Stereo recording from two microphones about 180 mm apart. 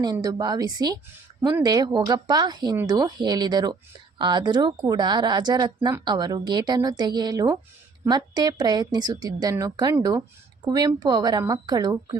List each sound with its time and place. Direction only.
0.0 s speech: 20° right (ahead or behind)